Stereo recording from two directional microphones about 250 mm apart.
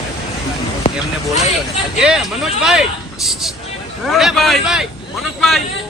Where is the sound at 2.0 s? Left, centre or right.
Centre.